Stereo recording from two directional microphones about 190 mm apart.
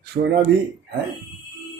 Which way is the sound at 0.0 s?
60° right (ahead or behind).